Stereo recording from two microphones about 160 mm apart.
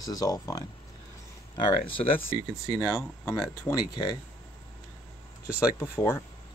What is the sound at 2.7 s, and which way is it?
Speech, 20° left (ahead or behind).